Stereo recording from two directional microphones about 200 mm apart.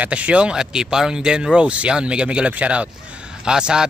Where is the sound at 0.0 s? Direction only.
5° right (ahead or behind).